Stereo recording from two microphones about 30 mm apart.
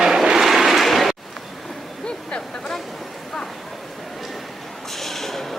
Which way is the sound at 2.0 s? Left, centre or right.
Left.